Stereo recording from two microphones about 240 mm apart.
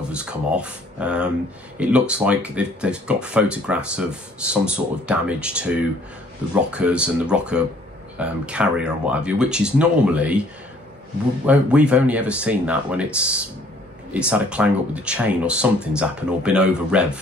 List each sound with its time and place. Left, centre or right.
0.1 s speech: centre
6.7 s speech: centre
11.4 s speech: centre